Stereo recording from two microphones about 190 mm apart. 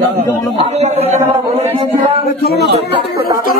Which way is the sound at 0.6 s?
35° right (ahead or behind).